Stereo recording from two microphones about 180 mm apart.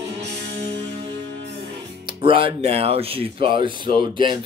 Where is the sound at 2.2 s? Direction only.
30° right (ahead or behind).